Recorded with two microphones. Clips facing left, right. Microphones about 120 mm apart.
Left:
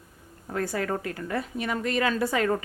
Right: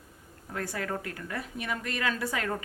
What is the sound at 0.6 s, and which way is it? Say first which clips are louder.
A woman's voice: left 5 dB; 35° left (ahead or behind).